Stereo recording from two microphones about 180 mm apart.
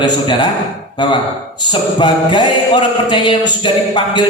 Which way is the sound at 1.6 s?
25° left (ahead or behind).